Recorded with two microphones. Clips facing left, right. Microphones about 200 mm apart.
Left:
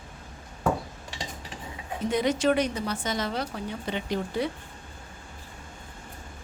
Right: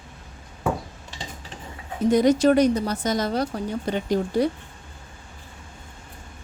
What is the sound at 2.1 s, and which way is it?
A woman's voice, 40° right (ahead or behind).